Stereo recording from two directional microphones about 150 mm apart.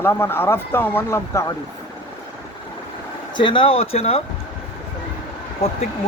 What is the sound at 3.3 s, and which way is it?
Speech, 35° left (ahead or behind).